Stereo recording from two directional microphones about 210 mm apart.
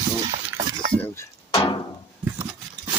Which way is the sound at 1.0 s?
10° left (ahead or behind).